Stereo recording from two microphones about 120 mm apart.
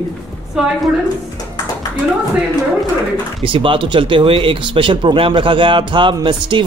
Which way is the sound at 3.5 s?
45° right (ahead or behind).